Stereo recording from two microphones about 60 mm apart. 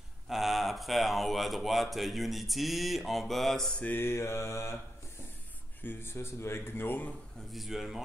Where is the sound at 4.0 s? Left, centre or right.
Left.